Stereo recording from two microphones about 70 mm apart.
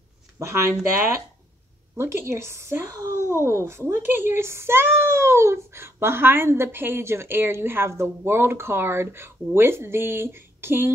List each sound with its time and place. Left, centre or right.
0.4 s speech: right